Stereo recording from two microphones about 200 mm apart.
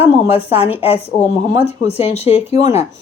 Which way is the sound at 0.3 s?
30° left (ahead or behind).